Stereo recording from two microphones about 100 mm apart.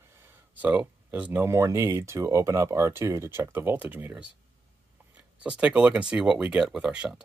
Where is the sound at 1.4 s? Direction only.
30° right (ahead or behind).